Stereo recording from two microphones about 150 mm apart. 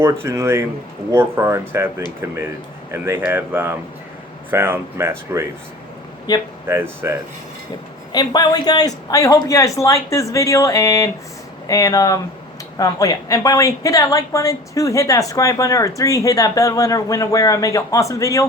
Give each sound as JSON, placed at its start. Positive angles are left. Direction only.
{"t": 0.0, "sound": "speech", "side_deg": -20}
{"t": 6.3, "sound": "a woman's voice", "side_deg": 25}
{"t": 6.7, "sound": "speech", "side_deg": -15}
{"t": 8.1, "sound": "a woman's voice", "side_deg": 25}